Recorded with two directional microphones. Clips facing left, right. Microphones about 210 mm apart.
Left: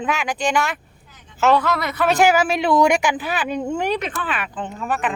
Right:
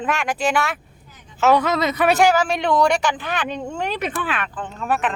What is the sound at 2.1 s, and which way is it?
Speech, 5° left (ahead or behind).